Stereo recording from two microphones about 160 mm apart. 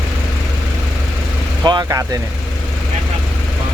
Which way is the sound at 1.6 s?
25° right (ahead or behind).